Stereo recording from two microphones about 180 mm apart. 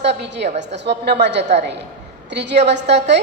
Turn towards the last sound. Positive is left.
turn(degrees=-70)  # may be behind; listen again after turning